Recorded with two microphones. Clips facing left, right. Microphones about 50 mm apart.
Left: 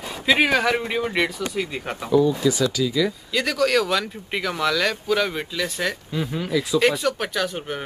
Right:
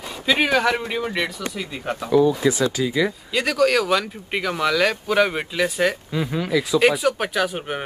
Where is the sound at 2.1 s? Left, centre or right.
Right.